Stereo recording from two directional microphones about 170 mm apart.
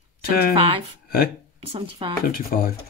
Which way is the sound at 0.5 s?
30° right (ahead or behind).